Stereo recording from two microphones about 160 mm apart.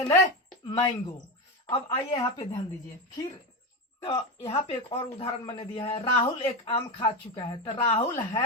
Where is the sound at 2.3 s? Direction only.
20° left (ahead or behind).